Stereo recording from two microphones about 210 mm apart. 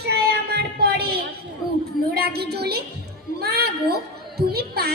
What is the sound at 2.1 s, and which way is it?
A woman's voice, 50° right (ahead or behind).